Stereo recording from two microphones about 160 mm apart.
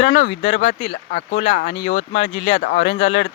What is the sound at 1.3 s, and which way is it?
Speech, 40° left (ahead or behind).